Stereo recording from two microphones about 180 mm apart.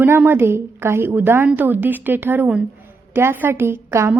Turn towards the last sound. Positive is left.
turn(degrees=-15)  # may be behind; listen again after turning